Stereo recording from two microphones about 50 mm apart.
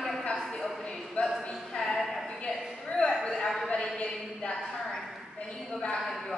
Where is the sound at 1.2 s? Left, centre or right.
Left.